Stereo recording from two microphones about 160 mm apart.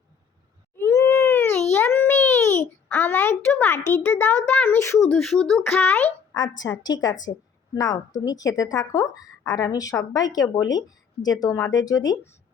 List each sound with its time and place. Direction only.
0.8 s a sound: 15° left (ahead or behind)
5.2 s a child's voice: 5° left (ahead or behind)
6.6 s a woman's voice: 25° left (ahead or behind)